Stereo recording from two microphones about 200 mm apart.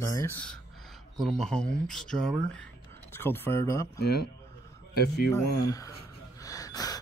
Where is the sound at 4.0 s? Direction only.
50° left (ahead or behind).